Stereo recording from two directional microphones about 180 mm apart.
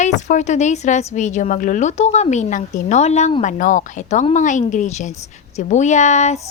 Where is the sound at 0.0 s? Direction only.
40° left (ahead or behind).